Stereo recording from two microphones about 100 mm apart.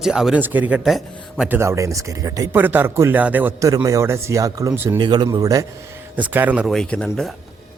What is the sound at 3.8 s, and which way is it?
Speech, 30° right (ahead or behind).